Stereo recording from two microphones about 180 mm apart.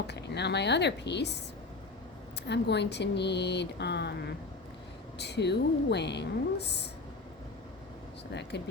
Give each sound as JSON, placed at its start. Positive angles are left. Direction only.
{"t": 0.1, "sound": "a woman's voice", "side_deg": 70}
{"t": 2.5, "sound": "a woman's voice", "side_deg": 70}
{"t": 5.1, "sound": "a woman's voice", "side_deg": 70}
{"t": 8.4, "sound": "a woman's voice", "side_deg": 70}